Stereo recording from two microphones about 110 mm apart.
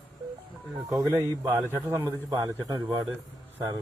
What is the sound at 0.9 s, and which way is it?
Speech, 35° right (ahead or behind).